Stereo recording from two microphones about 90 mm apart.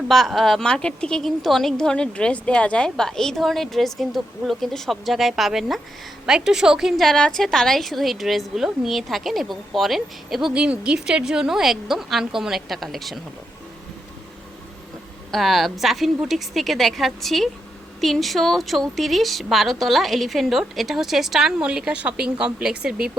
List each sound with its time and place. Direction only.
0.1 s a woman's voice: centre (ahead or behind)
15.3 s a woman's voice: centre (ahead or behind)